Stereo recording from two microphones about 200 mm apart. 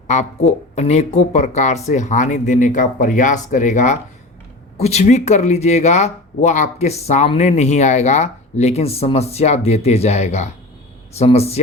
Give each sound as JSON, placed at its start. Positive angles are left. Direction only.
{"t": 0.1, "sound": "speech", "side_deg": 35}